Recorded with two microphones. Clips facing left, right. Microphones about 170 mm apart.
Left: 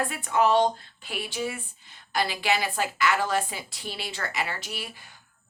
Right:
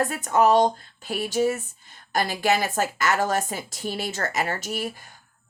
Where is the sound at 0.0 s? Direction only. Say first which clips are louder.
Right 4 dB; 45° right (ahead or behind).